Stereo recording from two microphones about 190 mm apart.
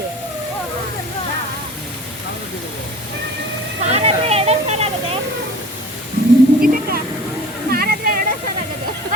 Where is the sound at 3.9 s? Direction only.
30° right (ahead or behind).